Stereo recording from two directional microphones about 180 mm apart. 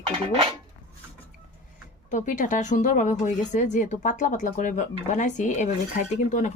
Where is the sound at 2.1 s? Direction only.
45° left (ahead or behind).